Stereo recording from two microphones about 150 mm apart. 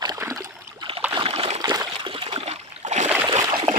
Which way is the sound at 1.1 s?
40° right (ahead or behind).